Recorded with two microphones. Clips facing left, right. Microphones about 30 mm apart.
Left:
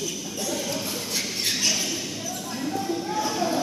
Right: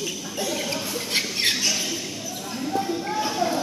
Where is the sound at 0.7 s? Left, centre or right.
Right.